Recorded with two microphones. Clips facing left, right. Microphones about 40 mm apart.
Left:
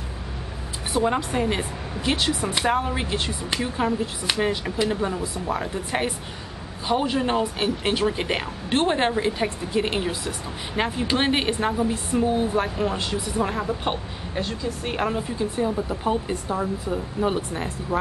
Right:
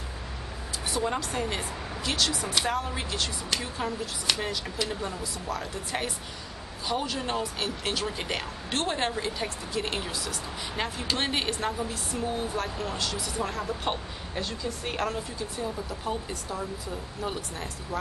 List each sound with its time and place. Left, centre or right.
0.9 s speech: left